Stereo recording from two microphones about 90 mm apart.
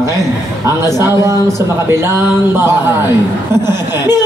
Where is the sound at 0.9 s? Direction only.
35° right (ahead or behind).